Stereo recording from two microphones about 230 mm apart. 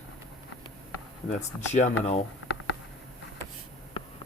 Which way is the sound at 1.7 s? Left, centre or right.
Left.